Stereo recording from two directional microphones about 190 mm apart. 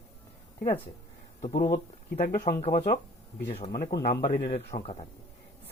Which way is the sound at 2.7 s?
40° left (ahead or behind).